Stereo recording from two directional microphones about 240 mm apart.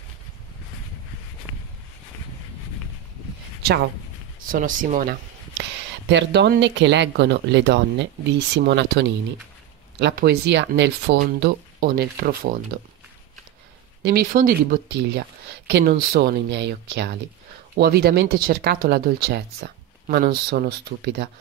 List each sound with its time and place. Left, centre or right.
4.5 s speech: right
6.0 s speech: right
14.0 s speech: right